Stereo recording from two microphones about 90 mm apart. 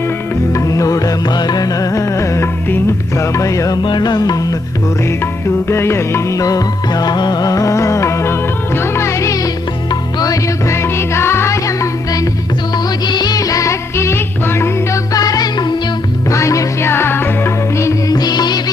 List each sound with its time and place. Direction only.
0.5 s music: 35° left (ahead or behind)
3.8 s music: 50° left (ahead or behind)
5.0 s music: 30° left (ahead or behind)
12.7 s music: 50° left (ahead or behind)
16.3 s music: 35° left (ahead or behind)
18.1 s music: 45° left (ahead or behind)